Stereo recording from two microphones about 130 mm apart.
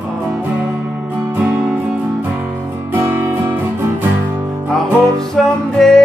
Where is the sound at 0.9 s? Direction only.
15° right (ahead or behind).